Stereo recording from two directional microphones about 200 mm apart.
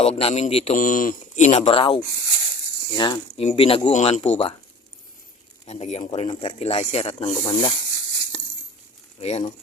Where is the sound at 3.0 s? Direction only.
25° left (ahead or behind).